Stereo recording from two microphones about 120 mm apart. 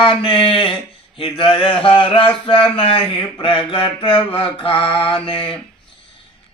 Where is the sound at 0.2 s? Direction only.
45° left (ahead or behind).